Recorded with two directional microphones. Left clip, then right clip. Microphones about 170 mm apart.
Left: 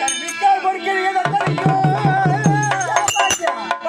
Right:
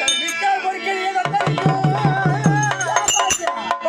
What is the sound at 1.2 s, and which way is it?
Tabla, 30° right (ahead or behind).